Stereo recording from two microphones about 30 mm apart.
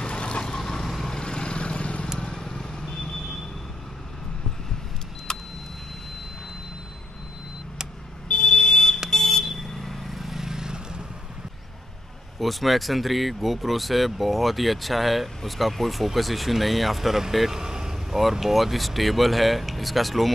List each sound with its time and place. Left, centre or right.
0.0 s vehicle: left
0.7 s vehicle: centre; by 2.0 s left
2.3 s vehicle: left
5.3 s vehicle: left
8.3 s vehicle: left
8.5 s car alarm: centre
9.1 s vehicle: centre
10.4 s vehicle: right
12.4 s speech: centre
17.6 s vehicle: centre
18.3 s speech: centre